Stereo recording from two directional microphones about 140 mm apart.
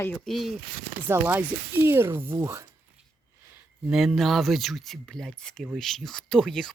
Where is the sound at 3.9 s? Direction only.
Centre (ahead or behind).